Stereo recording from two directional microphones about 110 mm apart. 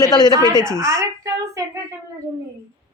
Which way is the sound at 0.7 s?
30° right (ahead or behind).